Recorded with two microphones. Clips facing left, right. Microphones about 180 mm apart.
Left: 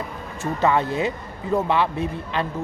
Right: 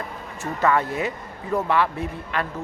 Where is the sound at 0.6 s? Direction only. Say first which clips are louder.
Left 1 dB; 25° left (ahead or behind).